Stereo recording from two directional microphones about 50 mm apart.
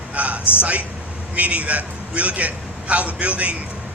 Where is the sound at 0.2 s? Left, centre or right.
Right.